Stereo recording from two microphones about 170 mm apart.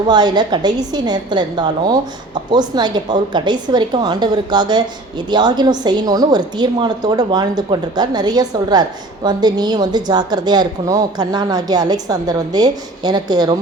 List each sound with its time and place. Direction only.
0.1 s a woman's voice: 25° right (ahead or behind)